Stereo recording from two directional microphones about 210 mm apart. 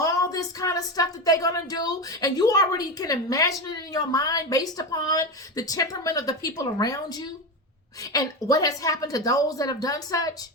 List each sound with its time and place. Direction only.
0.0 s speech: 15° left (ahead or behind)